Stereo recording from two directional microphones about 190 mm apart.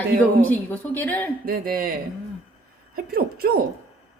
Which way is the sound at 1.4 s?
50° right (ahead or behind).